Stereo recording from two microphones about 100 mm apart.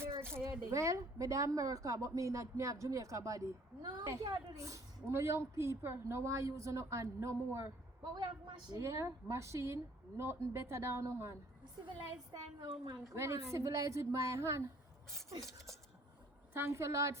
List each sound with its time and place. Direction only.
0.2 s a woman's voice: 25° right (ahead or behind)
8.0 s a woman's voice: 45° right (ahead or behind)
8.7 s a woman's voice: 30° right (ahead or behind)
11.9 s a woman's voice: 45° right (ahead or behind)
13.1 s a woman's voice: 30° right (ahead or behind)
16.6 s a woman's voice: 25° right (ahead or behind)